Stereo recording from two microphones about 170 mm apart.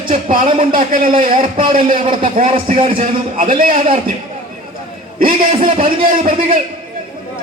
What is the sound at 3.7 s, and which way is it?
Speech, 35° right (ahead or behind).